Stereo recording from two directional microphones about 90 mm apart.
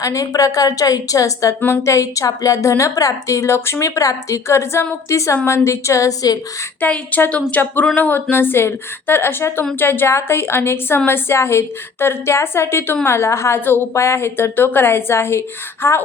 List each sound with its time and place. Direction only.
0.0 s a woman's voice: 40° left (ahead or behind)
6.8 s a woman's voice: 15° left (ahead or behind)